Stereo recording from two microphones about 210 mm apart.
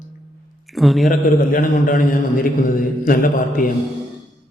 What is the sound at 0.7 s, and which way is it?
Speech, centre (ahead or behind).